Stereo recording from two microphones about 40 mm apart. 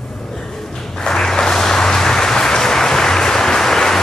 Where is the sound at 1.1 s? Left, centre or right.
Left.